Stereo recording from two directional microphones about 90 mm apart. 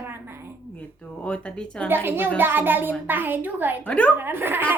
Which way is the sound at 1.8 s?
25° right (ahead or behind).